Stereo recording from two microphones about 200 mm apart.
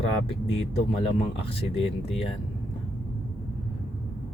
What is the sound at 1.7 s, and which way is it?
Speech, 30° left (ahead or behind).